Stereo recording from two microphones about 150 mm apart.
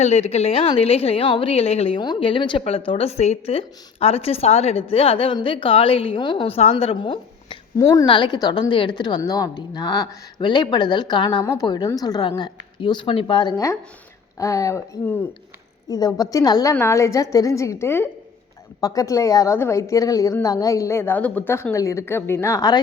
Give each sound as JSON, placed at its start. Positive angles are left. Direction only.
{"t": 0.0, "sound": "a woman's voice", "side_deg": 45}
{"t": 7.8, "sound": "a woman's voice", "side_deg": 20}
{"t": 8.0, "sound": "a woman's voice", "side_deg": 30}